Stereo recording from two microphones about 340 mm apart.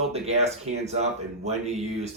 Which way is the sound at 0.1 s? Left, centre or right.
Centre.